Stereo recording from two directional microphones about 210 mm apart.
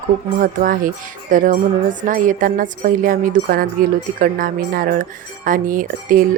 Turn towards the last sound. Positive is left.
turn(degrees=-40)  # may be behind; listen again after turning